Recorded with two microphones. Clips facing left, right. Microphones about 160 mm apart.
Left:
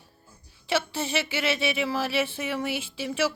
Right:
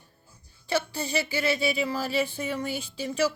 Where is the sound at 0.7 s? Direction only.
90° left.